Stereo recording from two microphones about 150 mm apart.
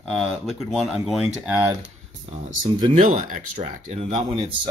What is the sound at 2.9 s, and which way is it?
Speech, 55° right (ahead or behind).